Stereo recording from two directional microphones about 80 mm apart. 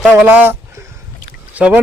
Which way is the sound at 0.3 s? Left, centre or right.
Right.